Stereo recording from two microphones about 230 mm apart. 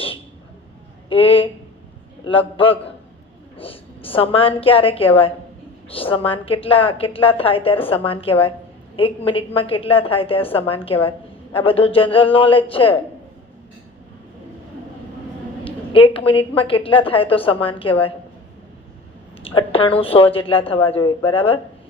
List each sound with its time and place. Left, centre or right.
1.1 s a woman's voice: left
15.6 s a woman's voice: left
19.4 s a woman's voice: left